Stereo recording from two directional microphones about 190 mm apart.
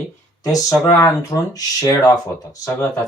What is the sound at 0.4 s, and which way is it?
Speech, 20° left (ahead or behind).